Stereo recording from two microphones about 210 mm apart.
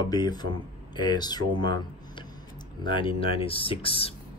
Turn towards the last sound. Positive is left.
turn(degrees=25)  # may be behind; listen again after turning